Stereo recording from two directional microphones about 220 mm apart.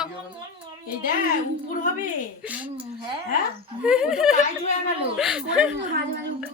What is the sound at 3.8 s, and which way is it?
Speech, 5° right (ahead or behind).